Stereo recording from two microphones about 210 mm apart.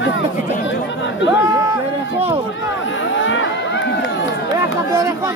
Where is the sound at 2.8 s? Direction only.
65° left (ahead or behind).